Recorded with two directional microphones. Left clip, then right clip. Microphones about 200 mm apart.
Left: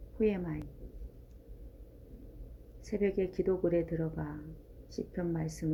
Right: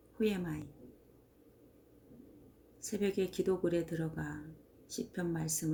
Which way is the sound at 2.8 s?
25° right (ahead or behind).